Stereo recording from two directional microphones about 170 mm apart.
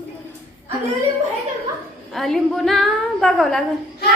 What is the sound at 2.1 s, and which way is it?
A woman's voice, centre (ahead or behind).